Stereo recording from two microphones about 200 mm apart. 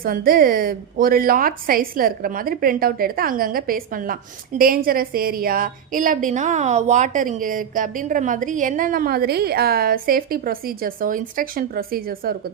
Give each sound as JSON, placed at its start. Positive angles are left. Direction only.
{"t": 0.0, "sound": "a woman's voice", "side_deg": -45}